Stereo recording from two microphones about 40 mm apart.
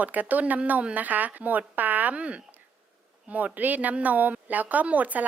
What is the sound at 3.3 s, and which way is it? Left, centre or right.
A woman's voice, right.